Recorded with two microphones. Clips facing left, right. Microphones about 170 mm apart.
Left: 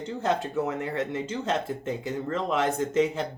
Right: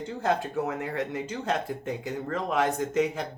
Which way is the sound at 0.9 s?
25° left (ahead or behind).